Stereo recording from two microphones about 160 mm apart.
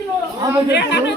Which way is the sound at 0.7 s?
90° left.